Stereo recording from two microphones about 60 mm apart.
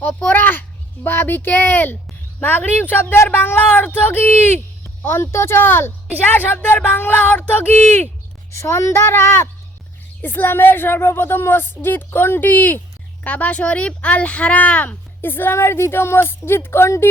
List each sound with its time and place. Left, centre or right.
0.3 s a woman's voice: left
8.5 s a woman's voice: left
10.2 s a woman's voice: left
13.2 s speech: left
15.2 s a woman's voice: left